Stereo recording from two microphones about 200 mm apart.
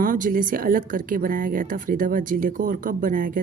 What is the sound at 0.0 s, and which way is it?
A woman's voice, 45° right (ahead or behind).